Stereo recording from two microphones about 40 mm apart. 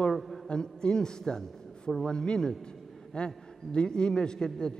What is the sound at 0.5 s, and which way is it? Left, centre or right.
A man's voice, centre.